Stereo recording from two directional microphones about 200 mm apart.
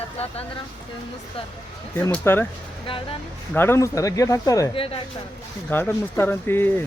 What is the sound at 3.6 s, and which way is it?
Speech, 10° left (ahead or behind).